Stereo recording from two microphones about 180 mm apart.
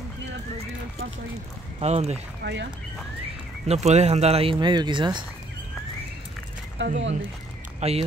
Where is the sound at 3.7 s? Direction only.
40° right (ahead or behind).